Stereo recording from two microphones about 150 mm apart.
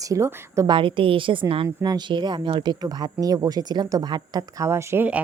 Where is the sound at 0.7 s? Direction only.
35° right (ahead or behind).